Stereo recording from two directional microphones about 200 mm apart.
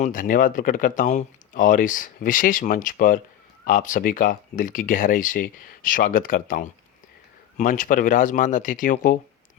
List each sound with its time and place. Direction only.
0.0 s speech: 40° left (ahead or behind)